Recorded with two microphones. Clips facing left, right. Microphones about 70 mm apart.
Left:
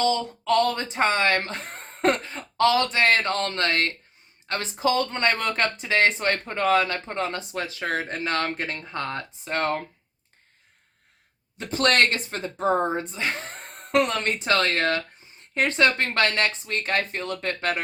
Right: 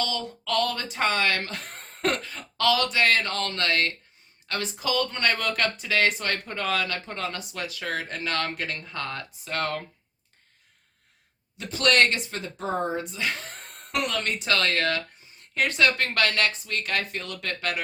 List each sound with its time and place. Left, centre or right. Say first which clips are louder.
0.0 s speech: left 6 dB; left
11.5 s speech: left 1 dB; left